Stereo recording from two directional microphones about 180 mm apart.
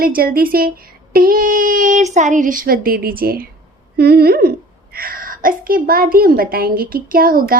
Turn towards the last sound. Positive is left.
turn(degrees=-55)  # may be behind; listen again after turning